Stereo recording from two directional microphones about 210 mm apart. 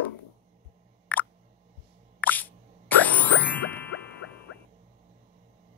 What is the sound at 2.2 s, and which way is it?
Plop, 10° left (ahead or behind).